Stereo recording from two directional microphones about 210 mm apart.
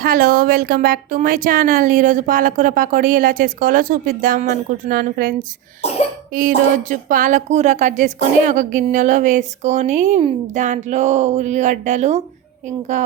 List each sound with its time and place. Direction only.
0.0 s a woman's voice: 40° right (ahead or behind)
6.8 s a woman's voice: 40° right (ahead or behind)